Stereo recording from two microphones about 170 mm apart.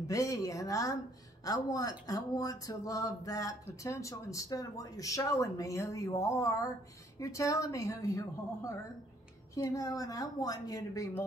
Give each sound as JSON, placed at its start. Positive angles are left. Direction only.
{"t": 0.0, "sound": "speech", "side_deg": 20}